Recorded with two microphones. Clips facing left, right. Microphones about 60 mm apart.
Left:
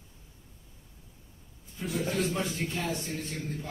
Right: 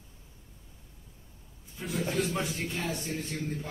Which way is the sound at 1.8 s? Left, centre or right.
Centre.